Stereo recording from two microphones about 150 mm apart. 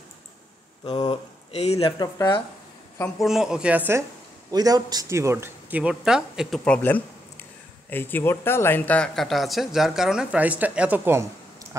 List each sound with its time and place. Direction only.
1.0 s speech: 45° left (ahead or behind)
1.9 s speech: 30° left (ahead or behind)
3.2 s speech: centre (ahead or behind)
4.5 s speech: 25° right (ahead or behind); by 6.6 s 5° right (ahead or behind)
6.6 s speech: 10° left (ahead or behind); by 11.2 s 15° right (ahead or behind)